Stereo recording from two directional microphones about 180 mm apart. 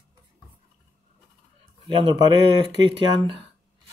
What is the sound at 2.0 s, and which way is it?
Speech, 30° right (ahead or behind).